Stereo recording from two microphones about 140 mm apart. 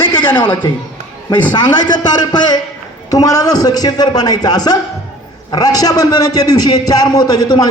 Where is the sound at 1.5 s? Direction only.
35° left (ahead or behind).